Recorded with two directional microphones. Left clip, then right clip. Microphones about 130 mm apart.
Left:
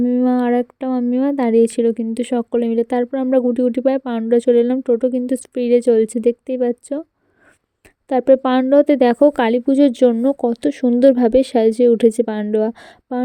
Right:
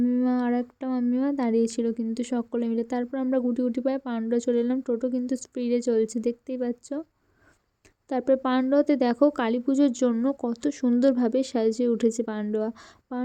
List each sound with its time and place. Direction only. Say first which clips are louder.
0.0 s a sound: left 9 dB; 45° left (ahead or behind)
1.1 s a woman's voice: left 11 dB; 45° left (ahead or behind)
8.1 s a woman's voice: left 10 dB; 45° left (ahead or behind)